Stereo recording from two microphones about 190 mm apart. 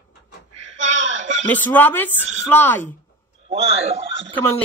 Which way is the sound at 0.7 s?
75° right (ahead or behind).